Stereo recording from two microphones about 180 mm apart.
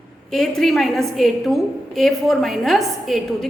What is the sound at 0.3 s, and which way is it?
A woman's voice, centre (ahead or behind).